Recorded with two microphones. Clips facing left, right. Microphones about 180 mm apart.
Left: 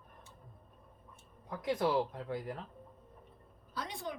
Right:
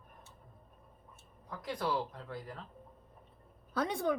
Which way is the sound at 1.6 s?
25° left (ahead or behind).